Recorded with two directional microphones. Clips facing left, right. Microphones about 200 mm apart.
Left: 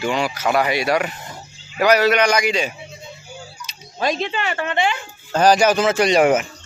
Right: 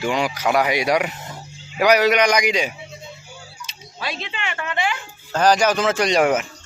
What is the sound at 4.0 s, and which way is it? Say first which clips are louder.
Speech: left 8 dB; 45° left (ahead or behind).